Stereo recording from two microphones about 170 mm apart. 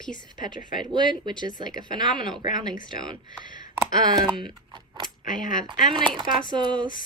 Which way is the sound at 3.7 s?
25° right (ahead or behind).